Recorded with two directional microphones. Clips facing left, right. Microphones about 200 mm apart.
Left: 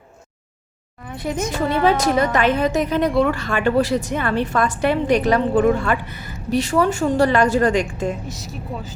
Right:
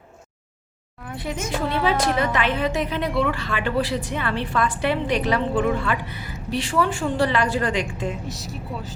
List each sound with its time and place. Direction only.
1.1 s a woman's voice: 45° left (ahead or behind)
8.3 s speech: centre (ahead or behind)